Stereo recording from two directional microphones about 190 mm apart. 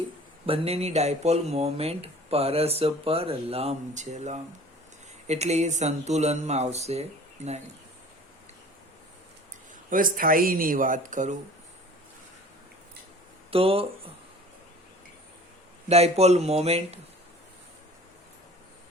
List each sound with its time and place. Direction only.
0.4 s speech: 30° right (ahead or behind)
9.9 s speech: 45° right (ahead or behind)
13.5 s speech: 30° right (ahead or behind)
15.9 s speech: 35° right (ahead or behind)